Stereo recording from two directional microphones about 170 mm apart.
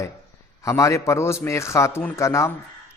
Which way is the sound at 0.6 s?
15° left (ahead or behind).